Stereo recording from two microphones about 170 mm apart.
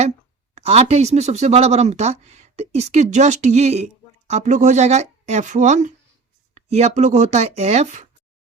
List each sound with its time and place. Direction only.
0.5 s speech: 40° right (ahead or behind)